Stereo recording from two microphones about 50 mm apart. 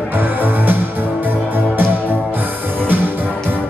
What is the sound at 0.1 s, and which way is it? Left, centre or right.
Music, right.